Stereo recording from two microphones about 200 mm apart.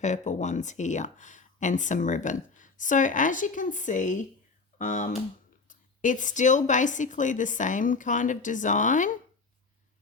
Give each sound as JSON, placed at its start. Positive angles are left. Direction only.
{"t": 0.0, "sound": "speech", "side_deg": 35}